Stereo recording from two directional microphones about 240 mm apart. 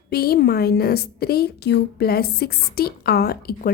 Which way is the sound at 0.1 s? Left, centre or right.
Left.